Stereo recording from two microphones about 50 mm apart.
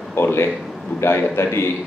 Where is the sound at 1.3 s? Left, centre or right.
Left.